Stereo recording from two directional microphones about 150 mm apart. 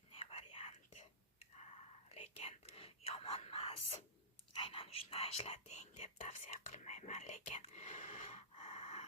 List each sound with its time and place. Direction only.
0.1 s whispering: 40° left (ahead or behind)
2.0 s whispering: 40° left (ahead or behind)